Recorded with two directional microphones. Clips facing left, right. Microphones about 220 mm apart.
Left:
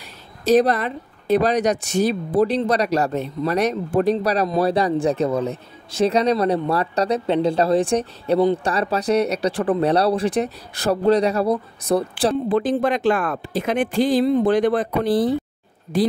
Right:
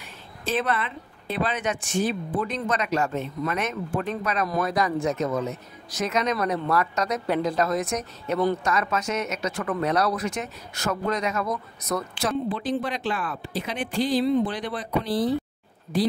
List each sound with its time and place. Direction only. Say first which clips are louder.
0.0 s speech: left 8 dB; 40° left (ahead or behind)
12.4 s speech: left 8 dB; 45° left (ahead or behind)